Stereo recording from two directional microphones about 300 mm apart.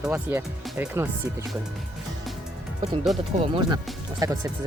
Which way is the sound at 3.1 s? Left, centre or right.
Centre.